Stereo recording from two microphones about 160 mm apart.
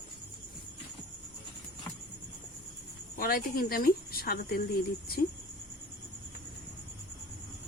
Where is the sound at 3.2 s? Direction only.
65° left (ahead or behind).